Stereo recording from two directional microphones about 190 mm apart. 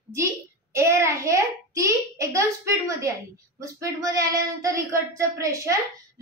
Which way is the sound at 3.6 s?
15° right (ahead or behind).